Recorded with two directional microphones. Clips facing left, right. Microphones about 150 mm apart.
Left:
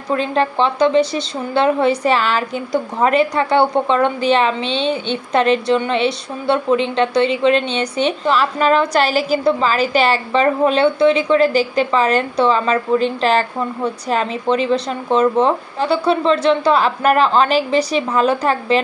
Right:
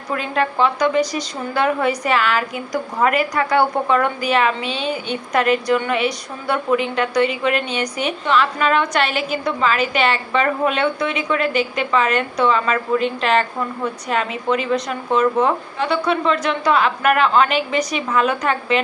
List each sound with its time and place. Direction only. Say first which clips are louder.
0.1 s a woman's voice: left 4 dB; 30° left (ahead or behind)